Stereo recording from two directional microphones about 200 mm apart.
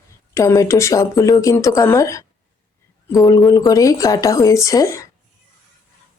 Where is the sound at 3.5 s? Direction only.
20° left (ahead or behind).